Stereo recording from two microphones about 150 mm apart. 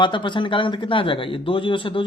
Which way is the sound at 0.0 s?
30° left (ahead or behind).